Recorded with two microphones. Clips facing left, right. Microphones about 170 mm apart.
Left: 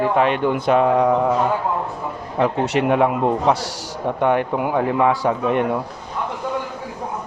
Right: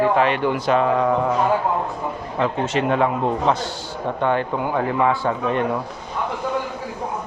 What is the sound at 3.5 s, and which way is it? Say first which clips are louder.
Speech: left 1 dB; 80° left.